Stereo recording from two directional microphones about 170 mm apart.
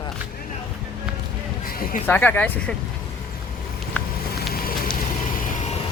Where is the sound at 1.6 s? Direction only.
60° left (ahead or behind).